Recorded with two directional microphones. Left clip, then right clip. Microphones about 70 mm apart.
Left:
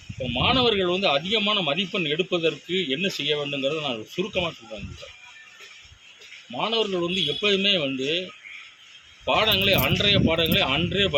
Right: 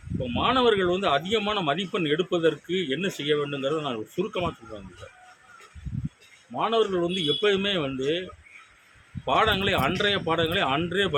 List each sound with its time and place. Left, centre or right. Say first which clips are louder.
0.3 s speech: left 1 dB; right
6.6 s speech: right 1 dB; right
7.0 s speech: even; right
7.6 s speech: left 5 dB; right
9.2 s speech: left 2 dB; right